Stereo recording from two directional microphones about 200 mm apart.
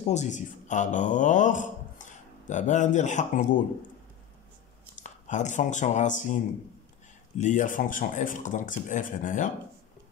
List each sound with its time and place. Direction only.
0.0 s a man's voice: 35° left (ahead or behind)
5.0 s speech: 35° left (ahead or behind)